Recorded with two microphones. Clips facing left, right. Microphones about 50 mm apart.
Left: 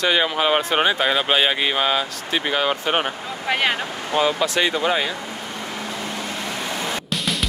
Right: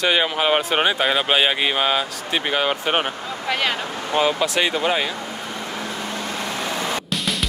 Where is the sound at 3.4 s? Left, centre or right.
Centre.